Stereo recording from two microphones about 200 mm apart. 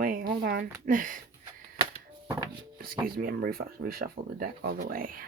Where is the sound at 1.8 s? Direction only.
20° right (ahead or behind).